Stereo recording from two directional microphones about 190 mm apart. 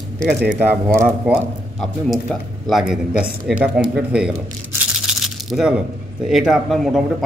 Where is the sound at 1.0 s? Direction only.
5° right (ahead or behind).